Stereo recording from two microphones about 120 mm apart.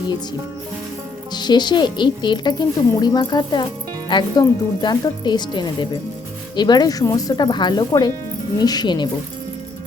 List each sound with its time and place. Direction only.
1.3 s speech: 35° left (ahead or behind)